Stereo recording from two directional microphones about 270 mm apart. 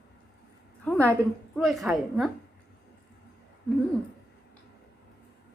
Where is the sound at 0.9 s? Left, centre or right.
Centre.